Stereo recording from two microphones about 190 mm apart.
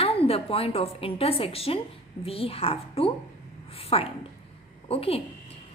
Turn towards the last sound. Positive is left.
turn(degrees=30)  # may be behind; listen again after turning